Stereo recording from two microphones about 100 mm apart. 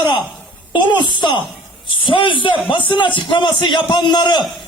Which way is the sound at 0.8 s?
50° left (ahead or behind).